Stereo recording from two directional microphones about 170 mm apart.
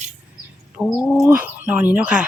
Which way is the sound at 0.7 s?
Centre (ahead or behind).